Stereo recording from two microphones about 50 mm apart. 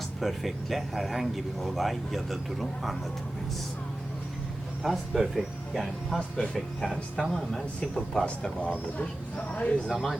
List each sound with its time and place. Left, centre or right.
0.2 s speech: centre
4.8 s speech: centre
6.1 s speech: left
6.8 s a man's voice: centre
8.2 s speech: left
9.9 s speech: centre